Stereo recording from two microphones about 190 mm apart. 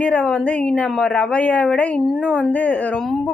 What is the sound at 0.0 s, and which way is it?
A woman's voice, 5° left (ahead or behind).